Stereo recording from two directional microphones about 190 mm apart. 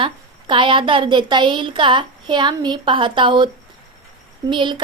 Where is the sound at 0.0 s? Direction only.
25° right (ahead or behind).